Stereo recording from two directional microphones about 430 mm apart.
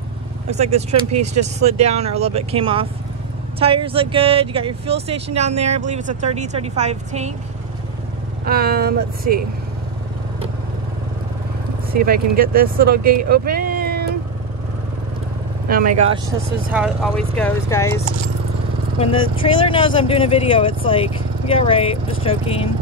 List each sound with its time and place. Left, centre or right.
0.5 s speech: centre
8.5 s speech: right
11.9 s speech: centre
16.0 s speech: centre